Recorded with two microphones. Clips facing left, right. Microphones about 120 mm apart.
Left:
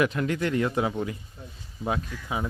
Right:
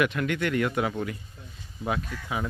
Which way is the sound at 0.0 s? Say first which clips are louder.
Left 1 dB; 30° left (ahead or behind).